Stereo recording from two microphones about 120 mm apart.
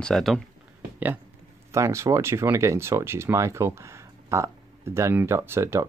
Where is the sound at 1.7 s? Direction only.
25° right (ahead or behind).